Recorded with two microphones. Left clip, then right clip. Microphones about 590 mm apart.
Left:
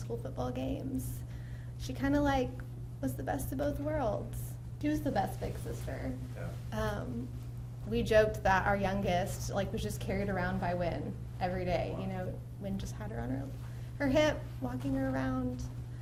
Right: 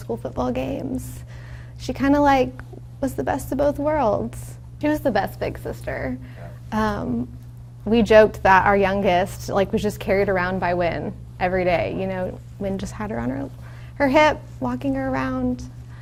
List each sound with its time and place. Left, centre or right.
0.2 s a woman's voice: right
6.7 s a woman's voice: right
14.0 s a woman's voice: right